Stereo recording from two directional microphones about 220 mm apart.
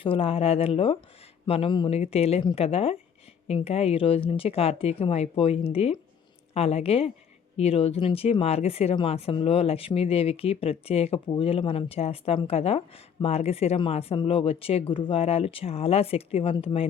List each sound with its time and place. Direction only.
0.0 s speech: 25° left (ahead or behind)